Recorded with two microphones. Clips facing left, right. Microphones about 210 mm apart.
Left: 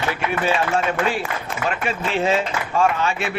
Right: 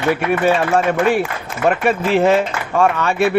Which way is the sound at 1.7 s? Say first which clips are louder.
Right 9 dB; 60° right (ahead or behind).